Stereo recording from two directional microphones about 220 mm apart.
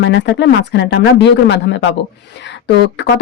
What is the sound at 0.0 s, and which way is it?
Speech, 55° left (ahead or behind).